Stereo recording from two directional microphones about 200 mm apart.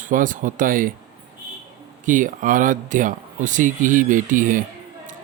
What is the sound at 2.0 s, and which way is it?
Speech, 40° right (ahead or behind).